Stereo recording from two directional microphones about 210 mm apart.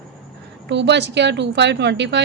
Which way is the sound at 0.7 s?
55° right (ahead or behind).